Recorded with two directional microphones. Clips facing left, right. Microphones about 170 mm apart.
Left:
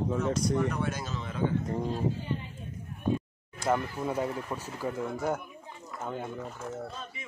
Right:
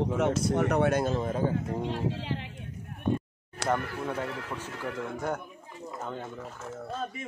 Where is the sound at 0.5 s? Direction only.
75° right (ahead or behind); by 1.5 s 45° right (ahead or behind).